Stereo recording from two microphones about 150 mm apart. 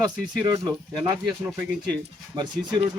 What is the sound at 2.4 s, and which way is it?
Speech, 30° right (ahead or behind).